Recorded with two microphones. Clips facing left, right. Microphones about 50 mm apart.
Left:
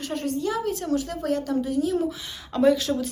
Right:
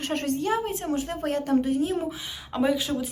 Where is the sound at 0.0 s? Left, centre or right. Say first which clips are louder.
Even; right.